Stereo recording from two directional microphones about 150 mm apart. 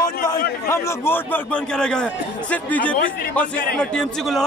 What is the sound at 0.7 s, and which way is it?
A man's voice, 15° left (ahead or behind).